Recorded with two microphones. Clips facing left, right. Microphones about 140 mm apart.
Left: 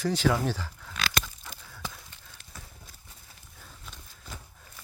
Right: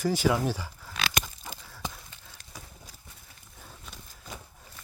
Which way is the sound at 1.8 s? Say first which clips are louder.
Right 2 dB; 20° right (ahead or behind).